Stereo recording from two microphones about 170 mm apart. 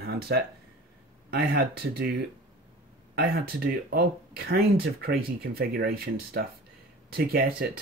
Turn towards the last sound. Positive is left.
turn(degrees=-65)  # may be behind; listen again after turning